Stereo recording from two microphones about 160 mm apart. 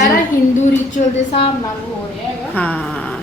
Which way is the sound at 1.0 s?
60° left (ahead or behind).